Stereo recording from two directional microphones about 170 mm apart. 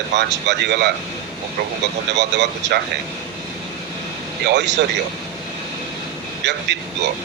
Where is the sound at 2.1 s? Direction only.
90° right.